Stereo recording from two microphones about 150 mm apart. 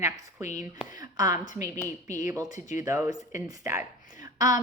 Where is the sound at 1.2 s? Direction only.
20° right (ahead or behind).